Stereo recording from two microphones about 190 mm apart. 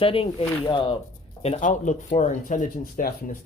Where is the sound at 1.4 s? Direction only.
35° left (ahead or behind).